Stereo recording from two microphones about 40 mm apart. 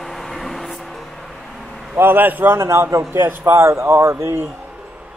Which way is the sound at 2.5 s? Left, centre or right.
Right.